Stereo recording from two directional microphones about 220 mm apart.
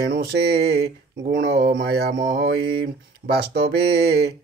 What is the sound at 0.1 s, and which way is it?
Mantra, 50° right (ahead or behind).